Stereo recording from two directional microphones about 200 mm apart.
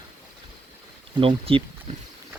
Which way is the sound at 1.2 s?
25° right (ahead or behind).